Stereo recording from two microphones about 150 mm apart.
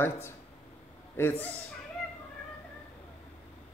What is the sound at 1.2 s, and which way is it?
Speech, 15° left (ahead or behind).